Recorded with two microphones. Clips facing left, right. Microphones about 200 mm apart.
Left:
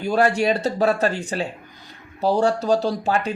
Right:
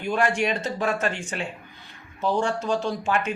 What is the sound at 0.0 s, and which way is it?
Speech, 40° left (ahead or behind).